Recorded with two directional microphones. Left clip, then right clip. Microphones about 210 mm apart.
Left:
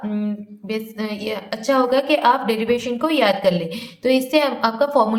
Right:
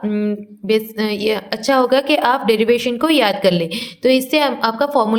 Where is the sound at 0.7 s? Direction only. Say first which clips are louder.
Right 9 dB; 35° right (ahead or behind).